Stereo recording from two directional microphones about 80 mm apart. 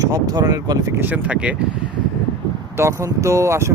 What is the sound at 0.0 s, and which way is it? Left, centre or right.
Speech, right.